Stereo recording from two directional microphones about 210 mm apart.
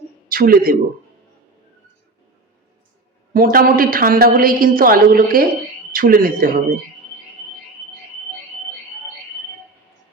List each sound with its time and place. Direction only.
0.3 s speech: 45° right (ahead or behind)
3.3 s a woman's voice: 45° right (ahead or behind)